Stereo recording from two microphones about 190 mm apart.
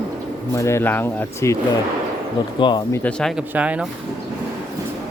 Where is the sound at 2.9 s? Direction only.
5° left (ahead or behind).